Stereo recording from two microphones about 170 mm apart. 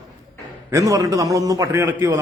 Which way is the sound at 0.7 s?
20° right (ahead or behind).